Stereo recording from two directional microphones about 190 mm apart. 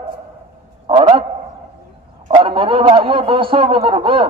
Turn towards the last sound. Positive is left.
turn(degrees=-25)  # may be behind; listen again after turning